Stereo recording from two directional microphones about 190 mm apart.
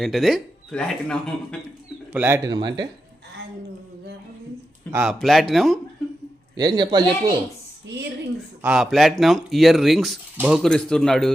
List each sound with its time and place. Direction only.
0.0 s speech: centre (ahead or behind)
2.1 s speech: 10° right (ahead or behind)
4.9 s speech: 5° right (ahead or behind)
6.6 s speech: 20° right (ahead or behind)
8.6 s speech: 5° right (ahead or behind)
10.7 s speech: 5° left (ahead or behind)